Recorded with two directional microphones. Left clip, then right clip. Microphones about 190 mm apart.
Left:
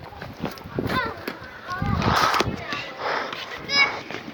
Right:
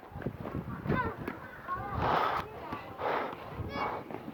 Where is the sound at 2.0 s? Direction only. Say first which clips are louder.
Left 10 dB; 45° right (ahead or behind).